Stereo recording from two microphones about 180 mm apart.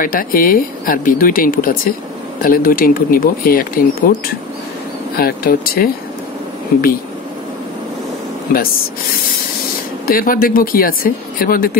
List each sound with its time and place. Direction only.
0.0 s speech: 50° left (ahead or behind)
10.0 s speech: 50° left (ahead or behind)